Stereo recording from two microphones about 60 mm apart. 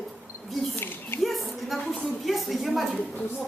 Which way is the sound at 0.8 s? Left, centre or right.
Left.